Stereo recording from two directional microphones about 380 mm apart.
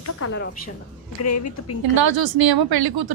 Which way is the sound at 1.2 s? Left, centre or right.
Left.